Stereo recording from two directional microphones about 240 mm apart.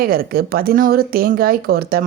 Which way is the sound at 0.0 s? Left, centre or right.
Right.